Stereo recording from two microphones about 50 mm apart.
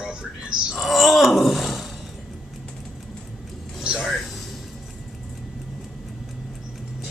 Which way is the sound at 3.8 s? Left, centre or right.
Centre.